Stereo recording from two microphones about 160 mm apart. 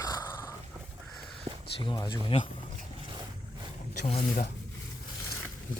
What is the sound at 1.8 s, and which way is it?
Speech, 30° left (ahead or behind).